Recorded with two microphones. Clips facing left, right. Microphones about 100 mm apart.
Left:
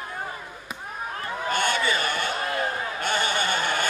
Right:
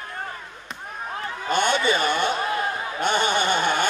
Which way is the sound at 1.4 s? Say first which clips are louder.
Right 4 dB; 20° right (ahead or behind).